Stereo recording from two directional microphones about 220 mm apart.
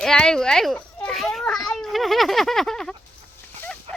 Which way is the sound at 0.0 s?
5° left (ahead or behind).